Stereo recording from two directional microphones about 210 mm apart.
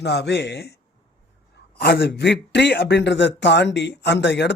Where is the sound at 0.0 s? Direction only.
50° left (ahead or behind).